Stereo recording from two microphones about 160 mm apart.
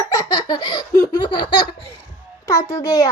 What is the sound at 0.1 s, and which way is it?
Laughter, 25° left (ahead or behind).